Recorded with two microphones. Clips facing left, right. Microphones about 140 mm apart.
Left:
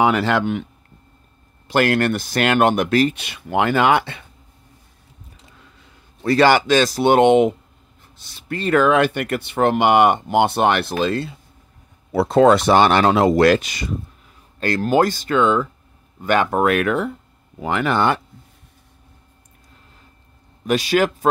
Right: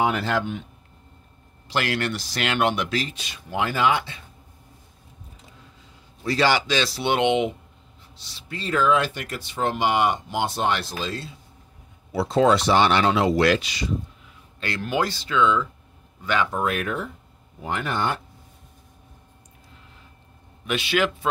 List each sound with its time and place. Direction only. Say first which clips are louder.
0.0 s speech: left 6 dB; 85° left
1.7 s speech: left 8 dB; 50° left (ahead or behind)
6.2 s speech: left 7 dB; 55° left (ahead or behind); by 17.1 s 80° left
17.6 s speech: left 7 dB; 90° left
20.6 s a man's voice: left 6 dB; 40° left (ahead or behind)